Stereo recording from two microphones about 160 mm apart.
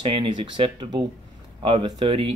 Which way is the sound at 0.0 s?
30° right (ahead or behind).